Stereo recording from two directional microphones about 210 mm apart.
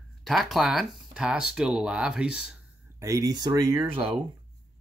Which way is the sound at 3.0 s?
15° right (ahead or behind).